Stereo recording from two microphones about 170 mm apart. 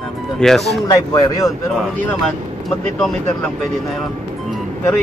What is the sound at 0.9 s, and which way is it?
Speech, 20° left (ahead or behind).